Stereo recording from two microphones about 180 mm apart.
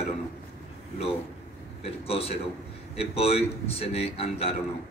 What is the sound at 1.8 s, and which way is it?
A man's voice, 35° left (ahead or behind).